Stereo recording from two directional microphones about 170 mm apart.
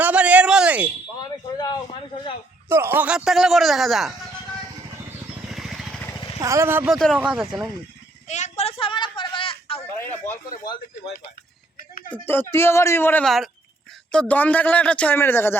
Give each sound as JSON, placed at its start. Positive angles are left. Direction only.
{"t": 0.0, "sound": "a sound", "side_deg": -10}
{"t": 1.2, "sound": "a sound", "side_deg": 25}
{"t": 2.6, "sound": "speech", "side_deg": -15}
{"t": 5.5, "sound": "vehicle", "side_deg": 0}
{"t": 6.4, "sound": "speech", "side_deg": -15}
{"t": 6.8, "sound": "speech", "side_deg": 0}
{"t": 7.2, "sound": "speech", "side_deg": -10}
{"t": 8.3, "sound": "a sound", "side_deg": 40}
{"t": 10.0, "sound": "a man's voice", "side_deg": 10}
{"t": 10.6, "sound": "speech", "side_deg": 25}
{"t": 12.1, "sound": "a man's voice", "side_deg": 10}
{"t": 13.2, "sound": "a man's voice", "side_deg": 0}